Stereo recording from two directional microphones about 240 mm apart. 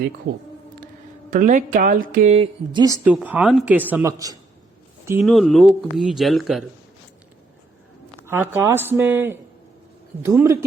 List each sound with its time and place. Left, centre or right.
1.3 s speech: right; by 4.4 s centre
5.2 s speech: centre
8.3 s speech: centre